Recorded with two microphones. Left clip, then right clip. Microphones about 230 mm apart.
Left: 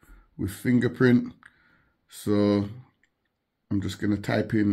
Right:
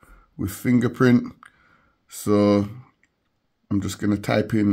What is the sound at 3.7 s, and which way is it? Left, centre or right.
Speech, right.